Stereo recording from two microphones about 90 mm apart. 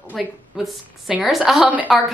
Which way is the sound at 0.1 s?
Centre (ahead or behind).